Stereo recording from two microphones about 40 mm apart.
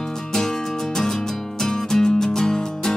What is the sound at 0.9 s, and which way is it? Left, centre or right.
Music, centre.